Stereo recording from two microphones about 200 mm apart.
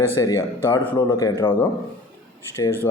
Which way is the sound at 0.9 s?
25° left (ahead or behind).